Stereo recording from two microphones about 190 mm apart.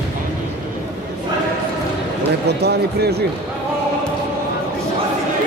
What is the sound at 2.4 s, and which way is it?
Speech, 60° right (ahead or behind).